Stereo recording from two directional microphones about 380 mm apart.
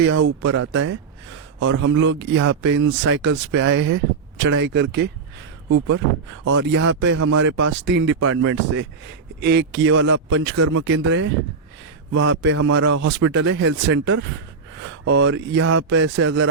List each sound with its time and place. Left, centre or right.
0.1 s speech: right
0.4 s speech: right
4.4 s speech: right
4.7 s speech: right